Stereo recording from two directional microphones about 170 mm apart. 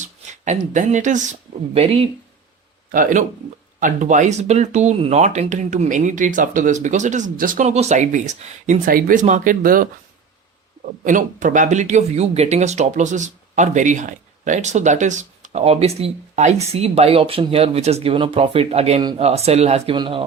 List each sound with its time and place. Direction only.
0.0 s speech: 45° right (ahead or behind)
2.9 s speech: 50° right (ahead or behind)
11.0 s speech: 50° right (ahead or behind); by 20.2 s 30° right (ahead or behind)